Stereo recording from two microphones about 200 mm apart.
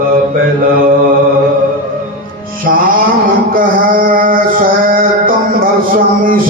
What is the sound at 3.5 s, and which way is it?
Mantra, 45° right (ahead or behind).